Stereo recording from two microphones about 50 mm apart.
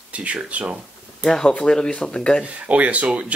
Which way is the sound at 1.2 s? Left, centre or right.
Centre.